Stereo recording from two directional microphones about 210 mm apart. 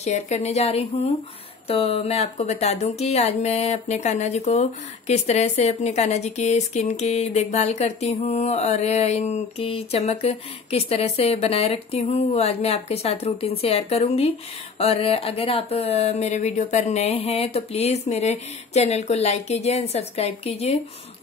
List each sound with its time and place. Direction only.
0.0 s speech: 30° left (ahead or behind)